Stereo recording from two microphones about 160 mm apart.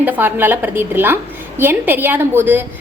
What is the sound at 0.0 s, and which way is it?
A woman's voice, 10° right (ahead or behind).